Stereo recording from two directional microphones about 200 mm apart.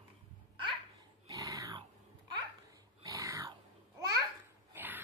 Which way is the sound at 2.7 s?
15° right (ahead or behind).